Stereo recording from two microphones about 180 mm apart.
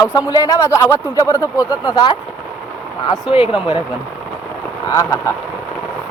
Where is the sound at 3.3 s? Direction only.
30° left (ahead or behind).